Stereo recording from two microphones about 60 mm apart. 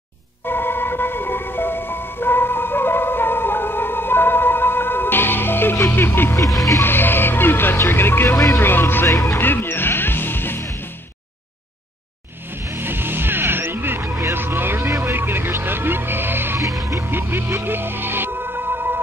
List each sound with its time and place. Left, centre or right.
0.5 s ice cream truck: left
6.8 s speech: left
8.5 s music: left
12.7 s music: right
14.9 s vehicle: right
16.8 s music: right